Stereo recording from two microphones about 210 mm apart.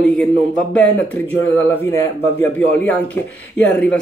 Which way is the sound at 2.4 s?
10° left (ahead or behind).